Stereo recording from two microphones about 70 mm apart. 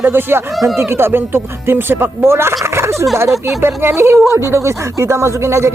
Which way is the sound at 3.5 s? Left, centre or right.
Right.